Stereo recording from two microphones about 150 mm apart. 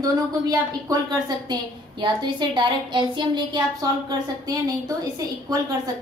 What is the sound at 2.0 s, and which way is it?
Speech, 30° right (ahead or behind).